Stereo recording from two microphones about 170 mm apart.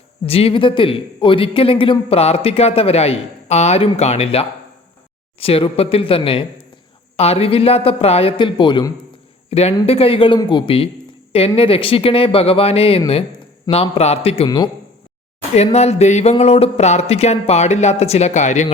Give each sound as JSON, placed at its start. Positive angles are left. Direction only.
{"t": 0.3, "sound": "speech", "side_deg": 35}
{"t": 9.5, "sound": "speech", "side_deg": 40}
{"t": 15.5, "sound": "speech", "side_deg": 40}